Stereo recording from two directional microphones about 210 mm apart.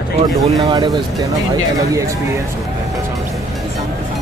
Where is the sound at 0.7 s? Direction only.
20° right (ahead or behind).